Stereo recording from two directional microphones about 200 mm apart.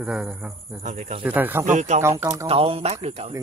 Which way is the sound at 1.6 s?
35° right (ahead or behind).